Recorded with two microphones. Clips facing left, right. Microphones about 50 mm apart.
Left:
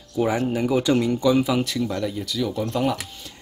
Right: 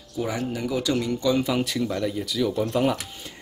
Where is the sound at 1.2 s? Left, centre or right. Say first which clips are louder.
Left 2 dB; centre.